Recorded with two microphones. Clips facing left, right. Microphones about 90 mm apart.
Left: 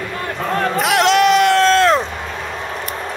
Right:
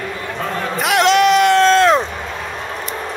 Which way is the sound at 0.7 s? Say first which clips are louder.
Right 1 dB; centre (ahead or behind).